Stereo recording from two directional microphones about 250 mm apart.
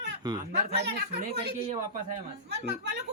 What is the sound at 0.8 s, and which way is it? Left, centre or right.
Speech, right.